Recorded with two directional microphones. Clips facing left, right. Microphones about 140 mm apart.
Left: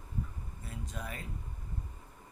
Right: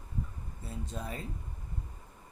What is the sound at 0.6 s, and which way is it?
Speech, 30° right (ahead or behind).